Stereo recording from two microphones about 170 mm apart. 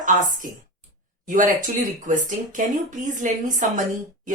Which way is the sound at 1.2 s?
50° right (ahead or behind).